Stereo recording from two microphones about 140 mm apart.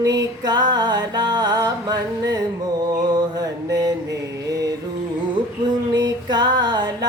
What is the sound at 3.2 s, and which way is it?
Mantra, 30° right (ahead or behind).